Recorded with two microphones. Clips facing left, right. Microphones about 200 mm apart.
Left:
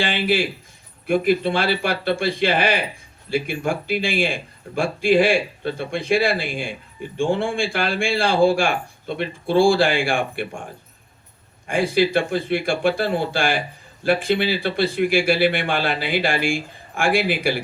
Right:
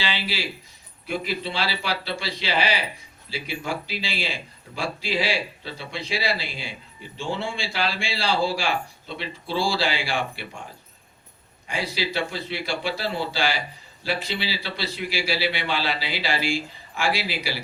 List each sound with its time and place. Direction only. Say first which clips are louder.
0.0 s a man's voice: left 9 dB; 50° left (ahead or behind)
11.7 s a man's voice: left 10 dB; 50° left (ahead or behind)